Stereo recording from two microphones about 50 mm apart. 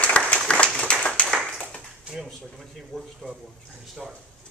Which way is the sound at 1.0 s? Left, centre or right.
Left.